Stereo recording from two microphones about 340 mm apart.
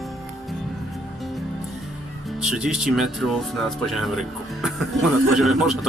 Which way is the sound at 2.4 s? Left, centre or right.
Centre.